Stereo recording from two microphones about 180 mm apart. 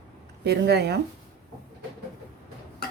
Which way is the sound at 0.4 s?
65° right (ahead or behind).